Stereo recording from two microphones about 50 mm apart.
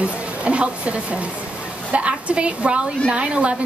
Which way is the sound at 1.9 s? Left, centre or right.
Right.